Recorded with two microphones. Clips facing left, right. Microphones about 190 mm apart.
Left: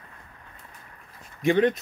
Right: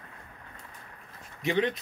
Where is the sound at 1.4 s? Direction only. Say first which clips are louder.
Left 7 dB; 50° left (ahead or behind).